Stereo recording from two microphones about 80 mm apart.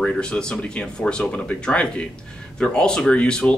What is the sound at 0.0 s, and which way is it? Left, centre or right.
Speech, centre.